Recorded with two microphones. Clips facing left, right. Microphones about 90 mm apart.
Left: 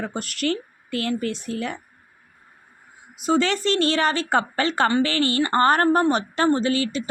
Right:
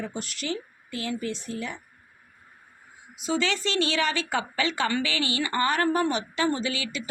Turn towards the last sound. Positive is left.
turn(degrees=40)  # may be behind; listen again after turning